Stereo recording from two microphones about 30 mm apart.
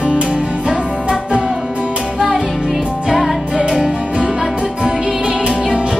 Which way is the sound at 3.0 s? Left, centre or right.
Centre.